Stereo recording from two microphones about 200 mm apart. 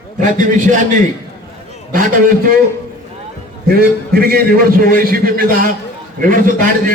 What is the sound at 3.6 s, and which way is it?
A man's voice, 50° right (ahead or behind).